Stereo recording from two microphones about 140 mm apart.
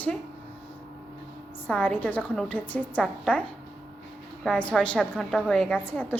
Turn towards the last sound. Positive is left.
turn(degrees=10)  # may be behind; listen again after turning